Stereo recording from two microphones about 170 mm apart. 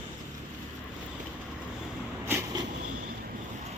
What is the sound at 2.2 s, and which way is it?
Vehicle, 15° right (ahead or behind).